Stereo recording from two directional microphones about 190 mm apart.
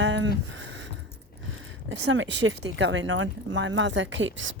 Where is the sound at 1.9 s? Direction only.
75° right (ahead or behind).